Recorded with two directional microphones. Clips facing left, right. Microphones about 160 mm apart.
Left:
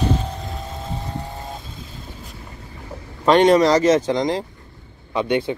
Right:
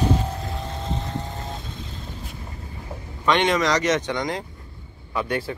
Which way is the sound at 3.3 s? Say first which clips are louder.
Left 7 dB; 35° left (ahead or behind).